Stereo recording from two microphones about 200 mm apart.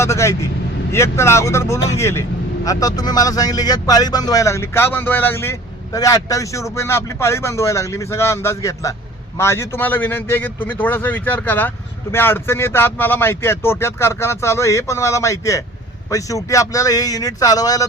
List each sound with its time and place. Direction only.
0.0 s speech: 15° left (ahead or behind)